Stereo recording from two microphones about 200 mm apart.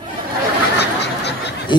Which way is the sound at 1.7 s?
25° left (ahead or behind).